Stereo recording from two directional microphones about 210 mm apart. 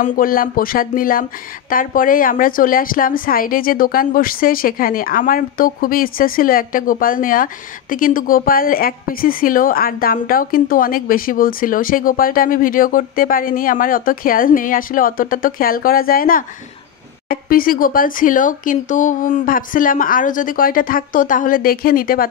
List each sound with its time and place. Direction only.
0.0 s a woman's voice: 40° left (ahead or behind)